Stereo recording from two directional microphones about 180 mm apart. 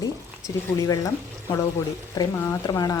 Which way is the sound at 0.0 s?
20° left (ahead or behind).